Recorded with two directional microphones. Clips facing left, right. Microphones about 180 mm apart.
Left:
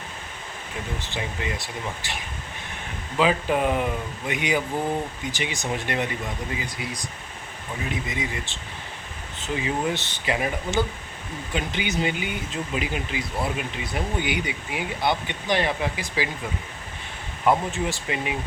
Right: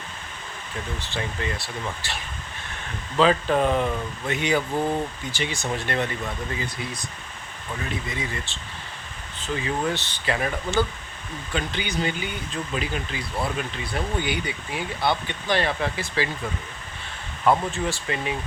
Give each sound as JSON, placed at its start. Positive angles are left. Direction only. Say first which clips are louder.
{"t": 1.0, "sound": "speech", "louder": "right 3 dB", "side_deg": 15}
{"t": 17.4, "sound": "speech", "louder": "even", "side_deg": 15}